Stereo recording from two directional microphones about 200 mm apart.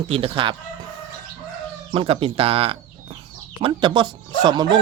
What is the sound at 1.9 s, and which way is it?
Speech, 25° right (ahead or behind).